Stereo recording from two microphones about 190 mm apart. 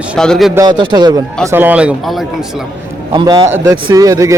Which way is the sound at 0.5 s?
20° right (ahead or behind).